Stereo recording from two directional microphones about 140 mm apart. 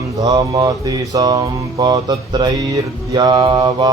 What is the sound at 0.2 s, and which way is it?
Mantra, 25° right (ahead or behind).